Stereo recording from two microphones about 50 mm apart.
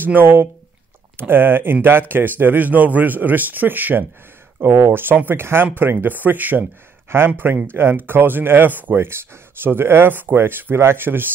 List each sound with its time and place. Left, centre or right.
0.0 s a man's voice: right